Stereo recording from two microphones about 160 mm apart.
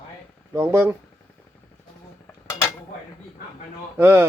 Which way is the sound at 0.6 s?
15° right (ahead or behind).